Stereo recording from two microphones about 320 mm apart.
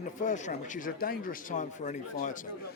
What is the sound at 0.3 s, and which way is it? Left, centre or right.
A man's voice, left.